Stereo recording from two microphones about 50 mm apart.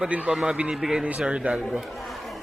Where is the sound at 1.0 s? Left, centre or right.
Right.